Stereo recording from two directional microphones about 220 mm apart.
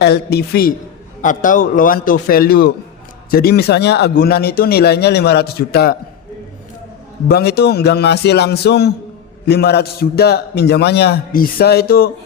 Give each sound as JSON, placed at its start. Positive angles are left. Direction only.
{"t": 0.0, "sound": "a man's voice", "side_deg": 45}
{"t": 7.3, "sound": "a man's voice", "side_deg": 45}